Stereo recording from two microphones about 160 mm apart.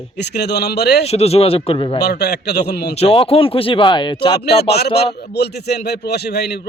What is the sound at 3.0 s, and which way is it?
Speech, 35° left (ahead or behind).